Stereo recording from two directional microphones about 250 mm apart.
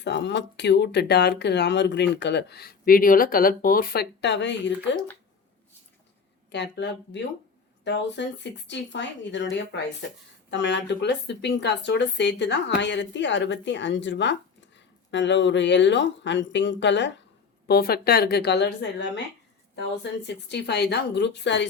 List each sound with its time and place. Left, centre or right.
0.0 s speech: left
6.5 s a woman's voice: left